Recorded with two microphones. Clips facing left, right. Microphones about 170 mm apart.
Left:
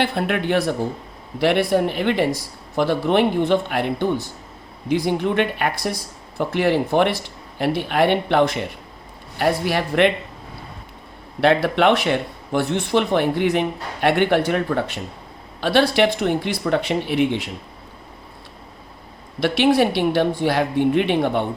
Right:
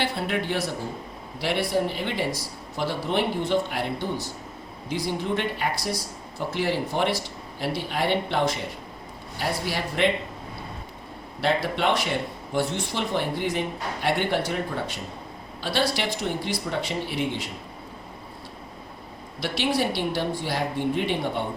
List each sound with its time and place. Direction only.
0.0 s speech: 60° left (ahead or behind)
11.3 s speech: 65° left (ahead or behind)
19.4 s speech: 60° left (ahead or behind)